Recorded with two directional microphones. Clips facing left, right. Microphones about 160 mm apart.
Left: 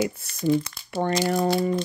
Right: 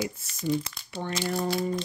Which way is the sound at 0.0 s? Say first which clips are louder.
Left 6 dB; 60° left (ahead or behind).